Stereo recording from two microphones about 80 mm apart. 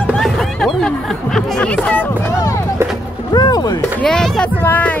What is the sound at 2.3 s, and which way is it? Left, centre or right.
Music, left.